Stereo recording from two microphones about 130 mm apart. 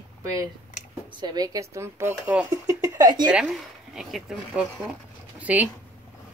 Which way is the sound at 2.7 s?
30° right (ahead or behind).